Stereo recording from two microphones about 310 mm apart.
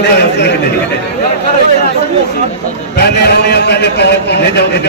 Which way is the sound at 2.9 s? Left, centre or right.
Left.